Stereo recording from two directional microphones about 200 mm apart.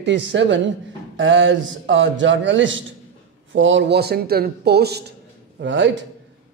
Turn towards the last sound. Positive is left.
turn(degrees=-65)  # may be behind; listen again after turning